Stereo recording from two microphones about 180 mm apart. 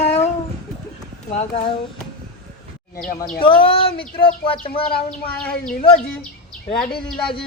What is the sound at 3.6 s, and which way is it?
Speech, 30° left (ahead or behind).